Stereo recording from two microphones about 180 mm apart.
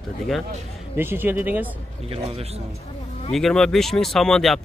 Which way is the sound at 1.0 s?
10° right (ahead or behind).